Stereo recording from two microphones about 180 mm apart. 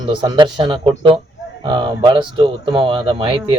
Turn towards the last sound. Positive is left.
turn(degrees=-30)  # may be behind; listen again after turning